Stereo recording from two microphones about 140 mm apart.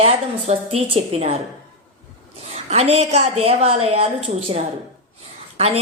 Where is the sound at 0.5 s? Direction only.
55° right (ahead or behind).